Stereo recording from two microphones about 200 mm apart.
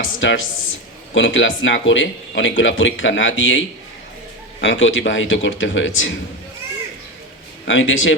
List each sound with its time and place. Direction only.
0.0 s speech: 75° left (ahead or behind)
4.6 s speech: 70° left (ahead or behind)
7.6 s speech: 70° left (ahead or behind)